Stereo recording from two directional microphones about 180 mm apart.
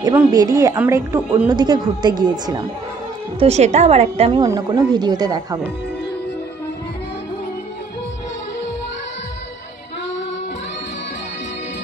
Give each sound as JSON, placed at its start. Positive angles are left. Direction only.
{"t": 0.0, "sound": "speech", "side_deg": -20}
{"t": 3.3, "sound": "a woman's voice", "side_deg": -35}
{"t": 4.4, "sound": "speech", "side_deg": -20}